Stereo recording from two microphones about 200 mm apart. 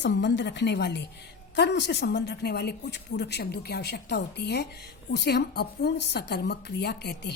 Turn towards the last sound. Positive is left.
turn(degrees=55)  # may be behind; listen again after turning